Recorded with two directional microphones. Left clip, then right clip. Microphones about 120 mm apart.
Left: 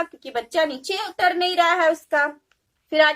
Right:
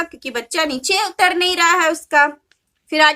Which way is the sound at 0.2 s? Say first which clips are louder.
Even; 30° right (ahead or behind).